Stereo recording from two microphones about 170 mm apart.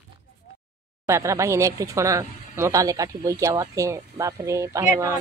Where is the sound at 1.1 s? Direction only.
15° right (ahead or behind).